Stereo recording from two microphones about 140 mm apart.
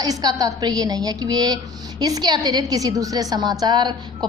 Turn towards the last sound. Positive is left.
turn(degrees=-30)  # may be behind; listen again after turning